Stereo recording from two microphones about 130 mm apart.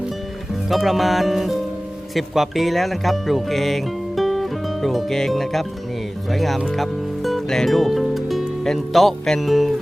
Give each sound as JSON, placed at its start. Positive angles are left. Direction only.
{"t": 0.7, "sound": "speech", "side_deg": 0}